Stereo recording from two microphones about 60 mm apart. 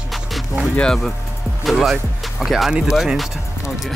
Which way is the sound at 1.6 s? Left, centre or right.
Centre.